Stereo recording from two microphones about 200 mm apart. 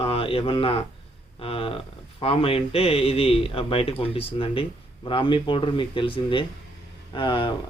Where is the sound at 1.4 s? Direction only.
25° left (ahead or behind).